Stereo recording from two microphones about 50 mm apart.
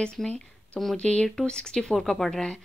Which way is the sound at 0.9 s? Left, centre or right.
Left.